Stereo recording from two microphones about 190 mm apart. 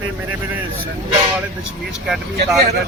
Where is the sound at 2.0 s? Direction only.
Centre (ahead or behind).